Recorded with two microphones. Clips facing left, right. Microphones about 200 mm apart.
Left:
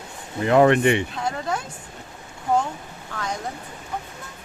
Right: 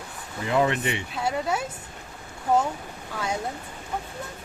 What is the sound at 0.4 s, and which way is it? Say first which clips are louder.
Speech: left 8 dB; 60° left (ahead or behind).